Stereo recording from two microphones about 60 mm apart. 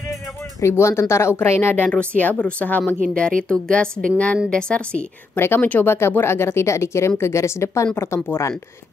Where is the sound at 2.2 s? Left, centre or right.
Left.